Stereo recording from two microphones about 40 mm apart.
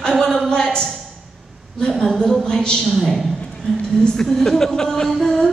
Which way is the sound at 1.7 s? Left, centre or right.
Centre.